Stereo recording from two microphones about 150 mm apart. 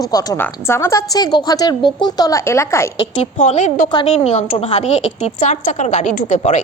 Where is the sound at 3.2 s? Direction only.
50° left (ahead or behind).